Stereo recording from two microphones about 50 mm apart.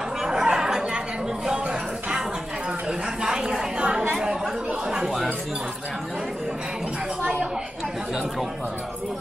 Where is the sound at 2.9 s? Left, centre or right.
Centre.